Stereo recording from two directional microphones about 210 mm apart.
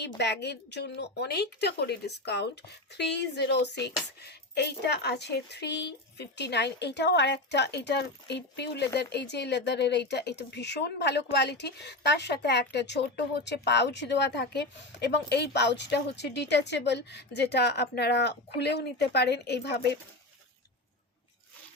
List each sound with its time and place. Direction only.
0.2 s speech: 55° left (ahead or behind)